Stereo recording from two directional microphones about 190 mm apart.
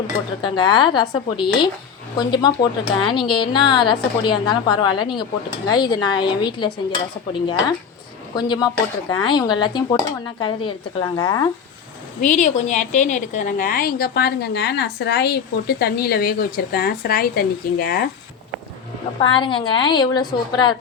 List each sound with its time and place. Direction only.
0.4 s speech: 25° left (ahead or behind)
8.4 s speech: 20° left (ahead or behind)
12.2 s a woman's voice: 40° left (ahead or behind)
19.2 s speech: 25° left (ahead or behind)